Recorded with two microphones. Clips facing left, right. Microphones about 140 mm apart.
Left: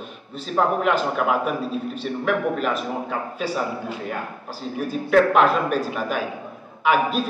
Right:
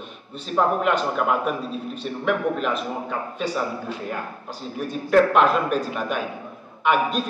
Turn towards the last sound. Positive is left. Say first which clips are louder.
# left 1 dB
turn(degrees=5)  # may be behind; listen again after turning